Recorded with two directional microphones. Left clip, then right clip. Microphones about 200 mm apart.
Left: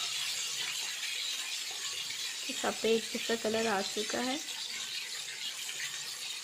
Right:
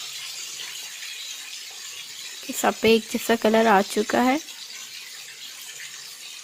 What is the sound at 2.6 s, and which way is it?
Speech, 50° right (ahead or behind).